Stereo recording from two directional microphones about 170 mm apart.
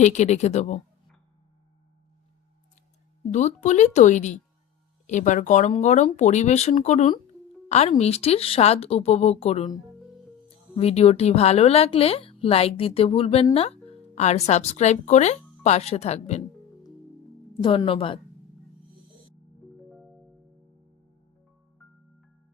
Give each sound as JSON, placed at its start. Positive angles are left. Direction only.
{"t": 0.0, "sound": "speech", "side_deg": 45}
{"t": 3.3, "sound": "speech", "side_deg": 45}
{"t": 10.8, "sound": "speech", "side_deg": 35}
{"t": 17.5, "sound": "speech", "side_deg": 30}